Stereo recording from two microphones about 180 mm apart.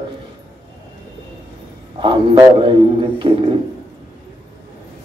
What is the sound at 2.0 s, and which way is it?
A man's voice, 25° right (ahead or behind).